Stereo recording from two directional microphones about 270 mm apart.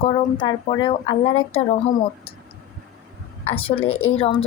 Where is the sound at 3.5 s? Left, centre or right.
Left.